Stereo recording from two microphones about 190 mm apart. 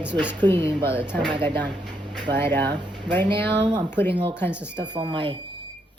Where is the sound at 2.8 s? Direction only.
25° right (ahead or behind).